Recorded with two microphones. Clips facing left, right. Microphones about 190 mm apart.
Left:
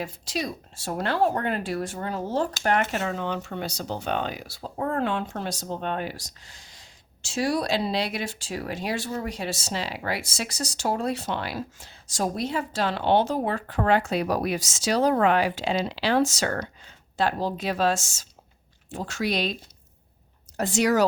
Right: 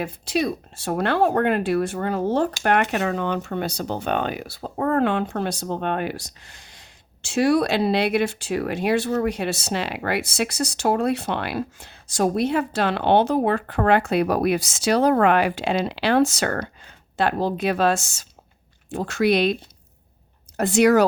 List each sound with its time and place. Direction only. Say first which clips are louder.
0.0 s speech: right 7 dB; 60° right (ahead or behind)
20.6 s speech: right 6 dB; 60° right (ahead or behind)